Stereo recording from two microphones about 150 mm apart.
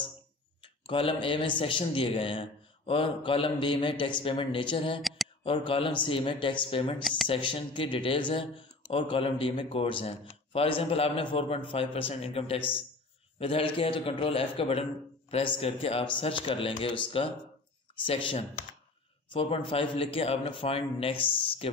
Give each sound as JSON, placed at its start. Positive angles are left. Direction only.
{"t": 0.8, "sound": "a man's voice", "side_deg": 35}
{"t": 5.0, "sound": "a sound", "side_deg": 0}
{"t": 5.4, "sound": "a man's voice", "side_deg": 35}